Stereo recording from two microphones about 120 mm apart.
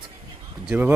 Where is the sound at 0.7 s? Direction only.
15° right (ahead or behind).